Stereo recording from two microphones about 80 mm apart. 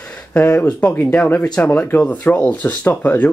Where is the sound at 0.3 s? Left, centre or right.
Left.